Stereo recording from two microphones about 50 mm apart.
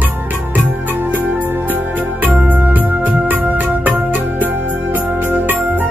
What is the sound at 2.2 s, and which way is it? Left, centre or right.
Organ, right.